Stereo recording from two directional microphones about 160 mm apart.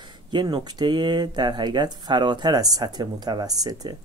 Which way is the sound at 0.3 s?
30° right (ahead or behind).